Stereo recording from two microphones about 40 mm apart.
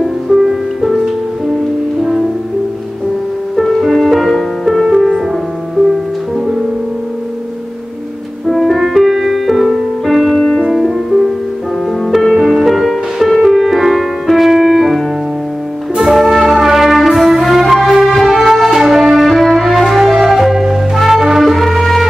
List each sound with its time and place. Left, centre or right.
0.0 s music: centre
3.6 s music: centre
4.8 s music: centre
8.5 s music: centre
10.4 s music: centre
10.7 s music: centre
12.4 s music: centre
14.5 s keyboard: centre
16.0 s brass instrument: centre
17.4 s music: centre
21.5 s music: centre